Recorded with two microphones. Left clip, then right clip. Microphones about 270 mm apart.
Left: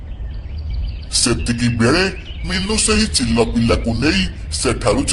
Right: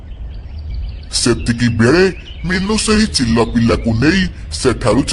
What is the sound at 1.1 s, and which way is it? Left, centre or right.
A man's voice, right.